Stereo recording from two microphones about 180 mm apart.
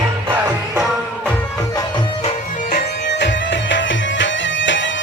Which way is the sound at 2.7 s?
80° left.